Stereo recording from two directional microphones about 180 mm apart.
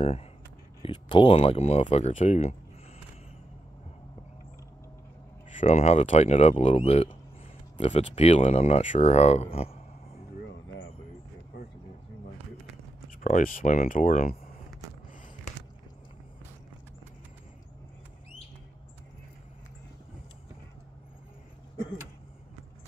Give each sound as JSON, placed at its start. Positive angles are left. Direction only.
{"t": 0.8, "sound": "speech", "side_deg": 30}
{"t": 5.5, "sound": "speech", "side_deg": 45}
{"t": 13.2, "sound": "speech", "side_deg": 50}